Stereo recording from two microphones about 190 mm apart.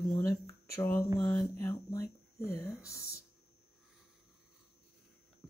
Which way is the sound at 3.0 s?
55° left (ahead or behind).